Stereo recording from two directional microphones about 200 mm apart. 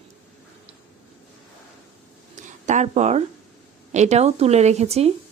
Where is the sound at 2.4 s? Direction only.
35° right (ahead or behind).